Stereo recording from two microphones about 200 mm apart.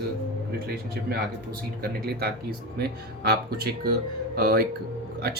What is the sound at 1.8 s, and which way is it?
Speech, 50° right (ahead or behind).